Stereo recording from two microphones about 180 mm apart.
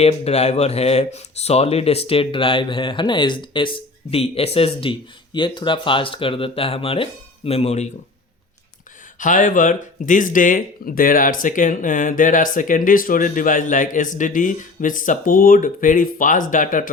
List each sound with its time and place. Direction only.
0.0 s speech: 35° left (ahead or behind)
9.1 s speech: 45° left (ahead or behind)